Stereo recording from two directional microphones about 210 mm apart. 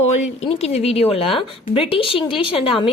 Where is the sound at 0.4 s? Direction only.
30° left (ahead or behind).